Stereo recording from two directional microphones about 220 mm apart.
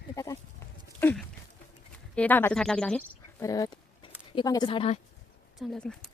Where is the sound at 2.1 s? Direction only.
10° left (ahead or behind).